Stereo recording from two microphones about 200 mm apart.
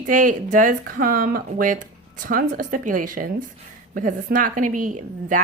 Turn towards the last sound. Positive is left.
turn(degrees=-40)  # may be behind; listen again after turning